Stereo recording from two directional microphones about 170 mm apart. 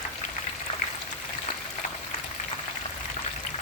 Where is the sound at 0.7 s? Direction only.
30° left (ahead or behind).